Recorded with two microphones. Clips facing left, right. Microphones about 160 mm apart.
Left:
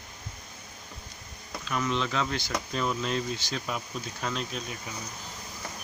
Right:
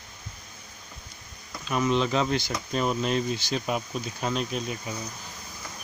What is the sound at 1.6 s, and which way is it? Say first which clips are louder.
Speech: right 5 dB; 20° right (ahead or behind).